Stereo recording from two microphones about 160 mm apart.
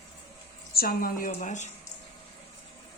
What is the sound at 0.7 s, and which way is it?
Speech, 70° left (ahead or behind).